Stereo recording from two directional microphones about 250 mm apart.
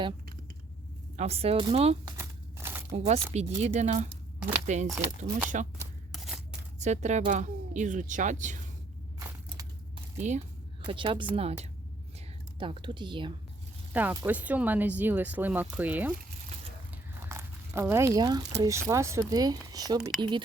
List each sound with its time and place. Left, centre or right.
1.1 s speech: right
2.1 s crumpling: centre
2.9 s speech: right
6.1 s scissors: centre
6.7 s speech: right
9.1 s crushing: centre
10.2 s speech: right
13.9 s speech: centre
17.2 s crumpling: centre
18.6 s speech: centre
20.0 s speech: centre